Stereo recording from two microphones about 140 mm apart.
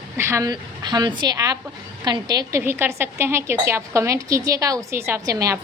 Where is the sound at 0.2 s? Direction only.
20° right (ahead or behind).